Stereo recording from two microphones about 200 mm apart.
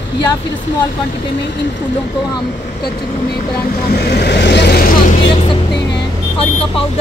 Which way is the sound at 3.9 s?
50° left (ahead or behind).